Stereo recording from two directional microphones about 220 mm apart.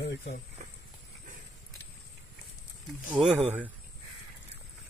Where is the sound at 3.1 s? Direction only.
5° right (ahead or behind).